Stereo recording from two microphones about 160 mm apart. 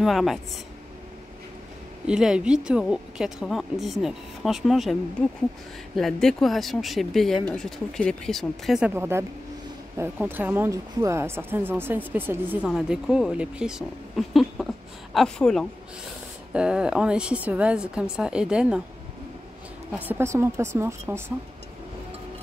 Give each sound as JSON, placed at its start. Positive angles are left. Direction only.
{"t": 0.0, "sound": "speech", "side_deg": 0}
{"t": 2.0, "sound": "speech", "side_deg": -5}
{"t": 5.9, "sound": "speech", "side_deg": 0}
{"t": 8.9, "sound": "speech", "side_deg": -15}
{"t": 19.9, "sound": "speech", "side_deg": -10}